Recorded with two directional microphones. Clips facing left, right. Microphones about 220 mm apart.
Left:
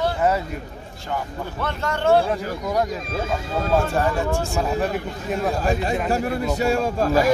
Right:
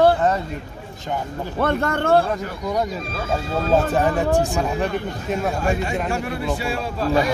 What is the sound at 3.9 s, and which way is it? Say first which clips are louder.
Speech: right 3 dB; 20° right (ahead or behind).